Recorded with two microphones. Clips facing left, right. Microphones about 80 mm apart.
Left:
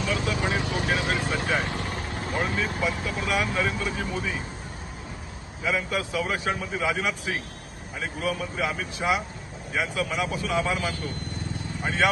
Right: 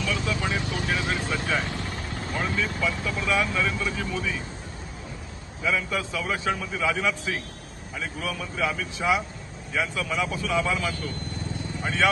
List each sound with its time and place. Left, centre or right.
0.0 s vehicle: left
1.8 s speech: left
5.6 s a man's voice: left
9.0 s speech: left
9.8 s a man's voice: left